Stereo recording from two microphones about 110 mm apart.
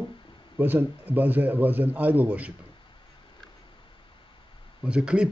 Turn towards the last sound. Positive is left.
turn(degrees=-10)  # may be behind; listen again after turning